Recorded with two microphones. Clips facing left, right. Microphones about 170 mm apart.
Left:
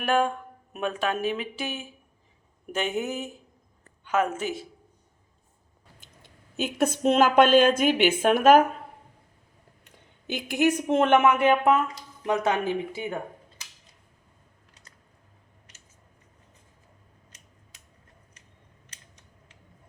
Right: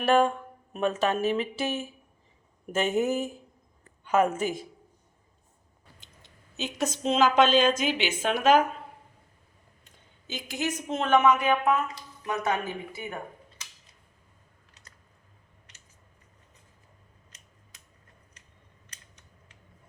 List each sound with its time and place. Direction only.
0.1 s speech: centre (ahead or behind)
6.0 s a sound: 50° left (ahead or behind)
6.7 s a woman's voice: 55° left (ahead or behind)
9.8 s a woman's voice: 60° left (ahead or behind)